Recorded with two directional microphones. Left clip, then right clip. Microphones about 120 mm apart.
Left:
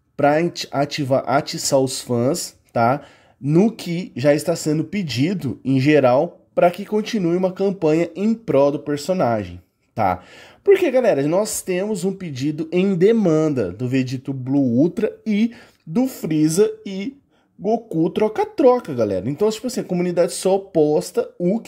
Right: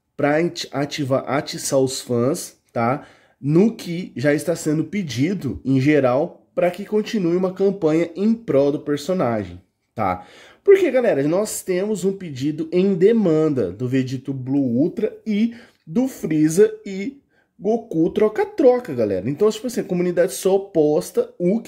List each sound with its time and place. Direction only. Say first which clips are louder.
0.2 s speech: left 2 dB; 30° left (ahead or behind)
8.7 s speech: even; 15° left (ahead or behind)
9.2 s a woman's voice: left 2 dB; 30° left (ahead or behind)
14.5 s speech: left 2 dB; 50° left (ahead or behind)
15.9 s speech: even; 25° left (ahead or behind)